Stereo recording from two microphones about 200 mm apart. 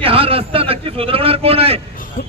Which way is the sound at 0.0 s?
30° right (ahead or behind).